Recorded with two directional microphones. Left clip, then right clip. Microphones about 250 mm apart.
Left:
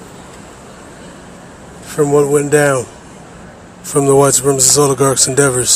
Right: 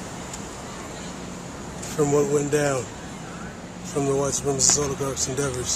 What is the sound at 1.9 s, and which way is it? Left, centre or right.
Speech, left.